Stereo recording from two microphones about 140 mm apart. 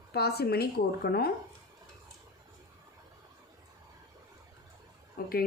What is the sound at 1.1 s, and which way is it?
Speech, 90° left.